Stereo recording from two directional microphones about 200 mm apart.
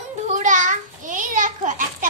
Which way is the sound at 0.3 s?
40° right (ahead or behind).